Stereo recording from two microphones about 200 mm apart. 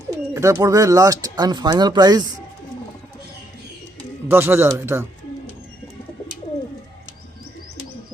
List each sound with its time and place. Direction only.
0.1 s speech: 15° right (ahead or behind)
4.3 s speech: 10° right (ahead or behind)